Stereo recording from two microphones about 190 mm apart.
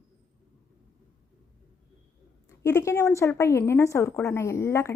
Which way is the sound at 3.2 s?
15° left (ahead or behind).